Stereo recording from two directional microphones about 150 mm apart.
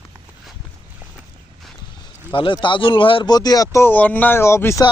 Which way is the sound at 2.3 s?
35° left (ahead or behind).